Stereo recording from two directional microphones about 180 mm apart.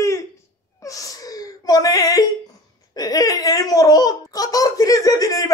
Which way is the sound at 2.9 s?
20° left (ahead or behind).